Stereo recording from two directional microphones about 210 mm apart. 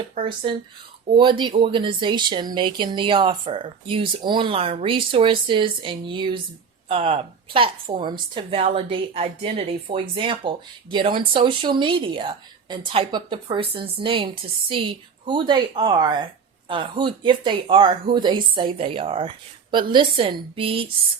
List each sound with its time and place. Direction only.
0.1 s speech: 25° right (ahead or behind)